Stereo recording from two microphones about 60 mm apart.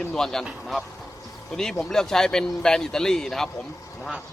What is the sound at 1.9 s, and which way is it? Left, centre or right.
Speech, centre.